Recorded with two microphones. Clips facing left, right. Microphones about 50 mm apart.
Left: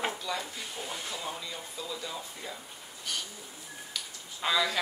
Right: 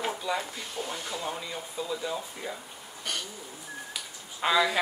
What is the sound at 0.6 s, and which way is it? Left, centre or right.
Speech, centre.